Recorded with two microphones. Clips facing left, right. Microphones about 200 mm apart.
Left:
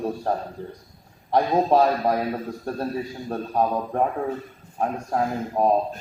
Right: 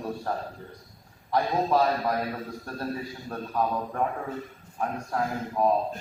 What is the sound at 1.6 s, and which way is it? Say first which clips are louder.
A man's voice: left 5 dB; 40° left (ahead or behind).